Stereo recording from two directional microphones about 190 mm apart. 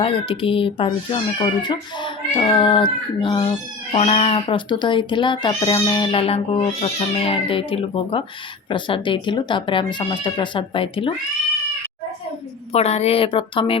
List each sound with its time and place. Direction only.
0.0 s speech: 30° left (ahead or behind)
12.7 s speech: 35° left (ahead or behind)